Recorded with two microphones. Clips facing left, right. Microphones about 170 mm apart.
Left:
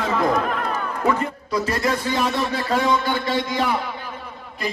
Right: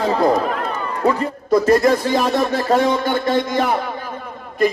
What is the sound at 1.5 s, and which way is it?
Speech, 45° right (ahead or behind).